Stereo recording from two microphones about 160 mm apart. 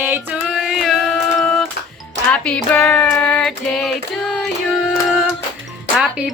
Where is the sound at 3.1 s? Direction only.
5° left (ahead or behind).